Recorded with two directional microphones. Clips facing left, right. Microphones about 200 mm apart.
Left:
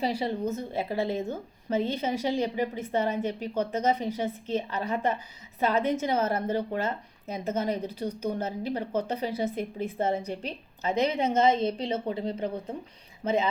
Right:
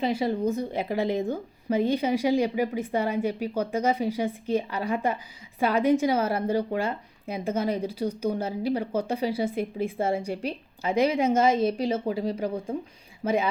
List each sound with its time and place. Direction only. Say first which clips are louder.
0.4 s a woman's voice: right 3 dB; 15° right (ahead or behind)